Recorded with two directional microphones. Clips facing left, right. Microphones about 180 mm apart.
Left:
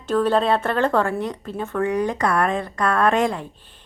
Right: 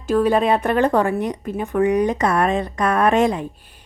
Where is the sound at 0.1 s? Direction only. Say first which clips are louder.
Right 2 dB; 10° right (ahead or behind).